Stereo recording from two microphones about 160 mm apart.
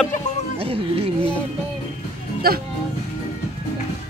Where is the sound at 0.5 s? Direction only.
35° right (ahead or behind).